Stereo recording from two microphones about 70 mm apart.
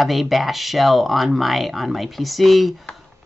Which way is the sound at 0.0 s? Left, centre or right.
Centre.